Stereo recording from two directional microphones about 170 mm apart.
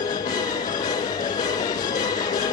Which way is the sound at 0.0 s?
20° left (ahead or behind).